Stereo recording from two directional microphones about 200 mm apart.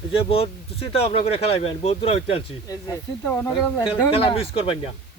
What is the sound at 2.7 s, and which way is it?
Speech, 20° left (ahead or behind).